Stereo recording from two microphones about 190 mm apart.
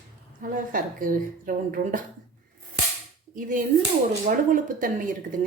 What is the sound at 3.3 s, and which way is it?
Speech, 45° right (ahead or behind).